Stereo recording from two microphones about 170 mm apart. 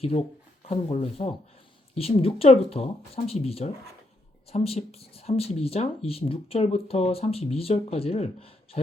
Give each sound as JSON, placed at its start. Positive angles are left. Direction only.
{"t": 0.0, "sound": "speech", "side_deg": 35}